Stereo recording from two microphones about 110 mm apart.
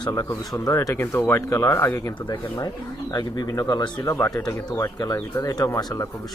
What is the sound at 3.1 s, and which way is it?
Speech, 35° left (ahead or behind).